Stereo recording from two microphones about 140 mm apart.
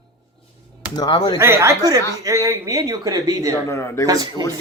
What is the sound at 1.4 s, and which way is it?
Speech, 20° right (ahead or behind).